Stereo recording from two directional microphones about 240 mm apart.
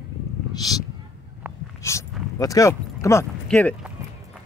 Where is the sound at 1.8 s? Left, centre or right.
Centre.